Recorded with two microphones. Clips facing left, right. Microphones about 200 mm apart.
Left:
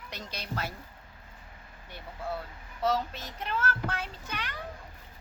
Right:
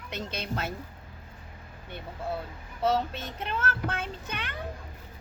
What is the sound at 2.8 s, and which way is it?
A child's voice, 25° right (ahead or behind).